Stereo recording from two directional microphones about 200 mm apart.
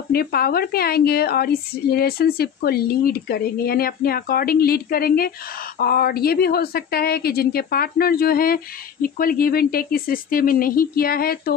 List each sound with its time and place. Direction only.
0.1 s a woman's voice: 50° left (ahead or behind)